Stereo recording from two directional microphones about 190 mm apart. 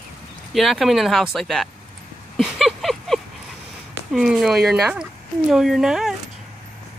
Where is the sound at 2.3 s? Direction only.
Centre (ahead or behind).